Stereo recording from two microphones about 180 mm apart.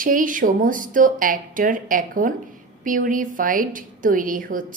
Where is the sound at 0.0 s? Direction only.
50° right (ahead or behind).